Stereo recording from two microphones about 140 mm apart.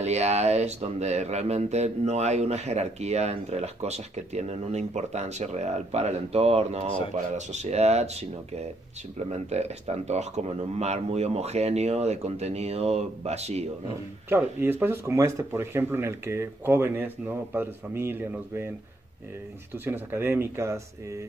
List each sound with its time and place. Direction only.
0.0 s speech: 50° right (ahead or behind)
14.3 s speech: 15° right (ahead or behind)
19.8 s speech: 15° right (ahead or behind)